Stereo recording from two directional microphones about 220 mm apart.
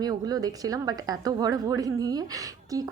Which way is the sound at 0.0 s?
15° right (ahead or behind).